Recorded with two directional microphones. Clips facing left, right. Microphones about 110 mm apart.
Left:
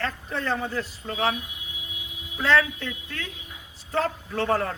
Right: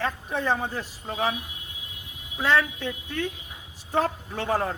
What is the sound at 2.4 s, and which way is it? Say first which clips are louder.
Speech: left 1 dB; 15° right (ahead or behind).